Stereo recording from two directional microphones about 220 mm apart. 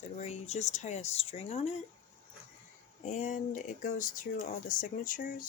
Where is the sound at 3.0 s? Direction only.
35° left (ahead or behind).